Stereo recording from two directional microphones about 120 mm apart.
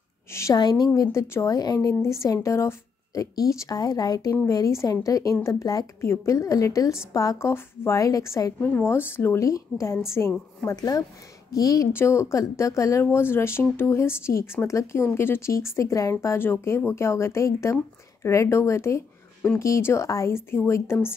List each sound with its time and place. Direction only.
0.3 s a woman's voice: 25° left (ahead or behind)
0.6 s a woman's voice: 35° left (ahead or behind)